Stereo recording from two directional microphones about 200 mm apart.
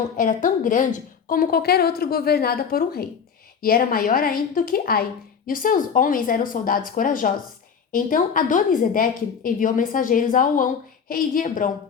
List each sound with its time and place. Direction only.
0.2 s a woman's voice: 40° left (ahead or behind)